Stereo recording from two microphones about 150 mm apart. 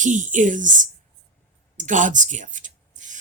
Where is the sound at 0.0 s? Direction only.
55° right (ahead or behind).